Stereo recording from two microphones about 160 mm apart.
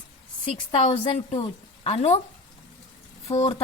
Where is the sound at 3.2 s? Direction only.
40° left (ahead or behind).